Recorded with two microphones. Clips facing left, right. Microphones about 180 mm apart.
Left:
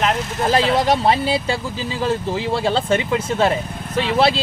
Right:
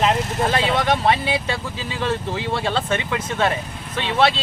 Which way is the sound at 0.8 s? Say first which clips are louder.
Left 2 dB; 35° left (ahead or behind).